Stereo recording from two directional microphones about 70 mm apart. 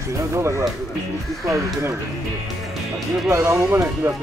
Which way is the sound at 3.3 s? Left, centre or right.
Right.